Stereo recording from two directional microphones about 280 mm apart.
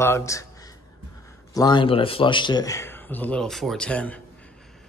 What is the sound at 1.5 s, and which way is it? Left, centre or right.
A man's voice, centre.